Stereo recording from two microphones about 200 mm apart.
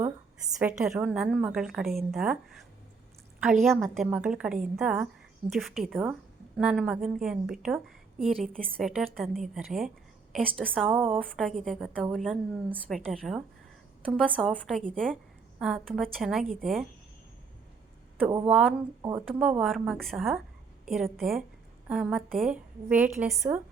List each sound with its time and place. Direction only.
0.0 s a woman's voice: 5° right (ahead or behind)
3.6 s a woman's voice: centre (ahead or behind)
11.1 s a woman's voice: centre (ahead or behind)
18.4 s a woman's voice: 5° right (ahead or behind)